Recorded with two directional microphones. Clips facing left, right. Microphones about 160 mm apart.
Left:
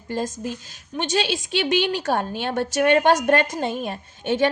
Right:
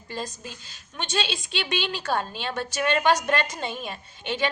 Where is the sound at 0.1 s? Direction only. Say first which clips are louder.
Left 8 dB; 50° left (ahead or behind).